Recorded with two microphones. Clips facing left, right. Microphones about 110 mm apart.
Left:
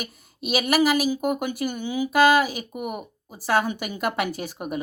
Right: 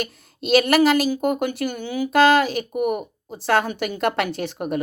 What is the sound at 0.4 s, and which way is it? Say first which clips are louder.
Speech: right 5 dB; 10° left (ahead or behind).